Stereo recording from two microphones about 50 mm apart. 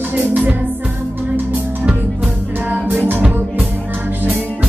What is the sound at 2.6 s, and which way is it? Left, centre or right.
Music, right.